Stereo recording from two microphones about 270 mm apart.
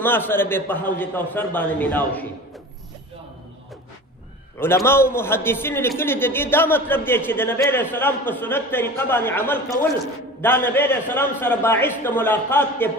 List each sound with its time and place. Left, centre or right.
0.0 s a man's voice: centre
4.8 s a man's voice: centre